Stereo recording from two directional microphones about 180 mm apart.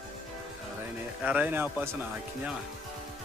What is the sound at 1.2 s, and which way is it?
Speech, 10° right (ahead or behind).